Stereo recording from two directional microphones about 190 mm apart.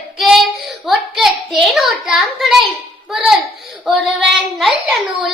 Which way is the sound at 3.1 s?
5° right (ahead or behind).